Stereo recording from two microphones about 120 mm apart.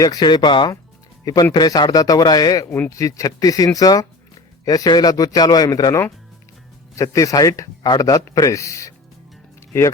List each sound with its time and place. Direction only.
0.0 s speech: 35° left (ahead or behind)
2.6 s speech: 10° left (ahead or behind)
2.9 s speech: 30° left (ahead or behind)